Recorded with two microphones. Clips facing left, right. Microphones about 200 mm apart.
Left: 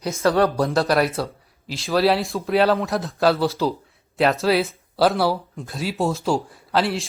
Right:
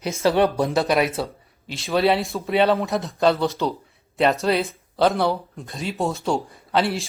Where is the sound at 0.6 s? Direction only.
Centre (ahead or behind).